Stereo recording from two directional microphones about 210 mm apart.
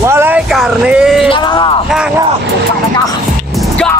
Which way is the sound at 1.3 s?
25° left (ahead or behind).